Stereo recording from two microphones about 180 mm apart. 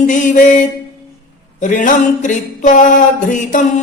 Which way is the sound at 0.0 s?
45° left (ahead or behind).